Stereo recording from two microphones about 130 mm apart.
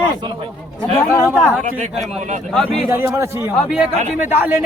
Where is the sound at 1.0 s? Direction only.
20° left (ahead or behind).